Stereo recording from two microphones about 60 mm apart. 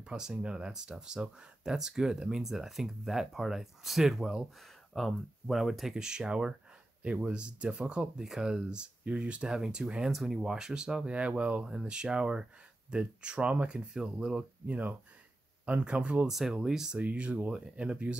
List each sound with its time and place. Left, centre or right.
0.0 s speech: centre
8.2 s speech: centre
16.3 s speech: centre
17.0 s speech: right